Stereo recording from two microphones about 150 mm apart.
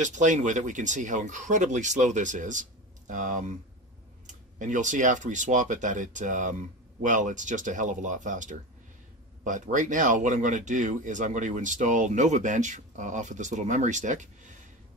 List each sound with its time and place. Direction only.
0.0 s speech: 55° right (ahead or behind)